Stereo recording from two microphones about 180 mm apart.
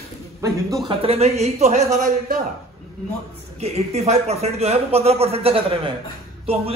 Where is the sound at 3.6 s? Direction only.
35° right (ahead or behind).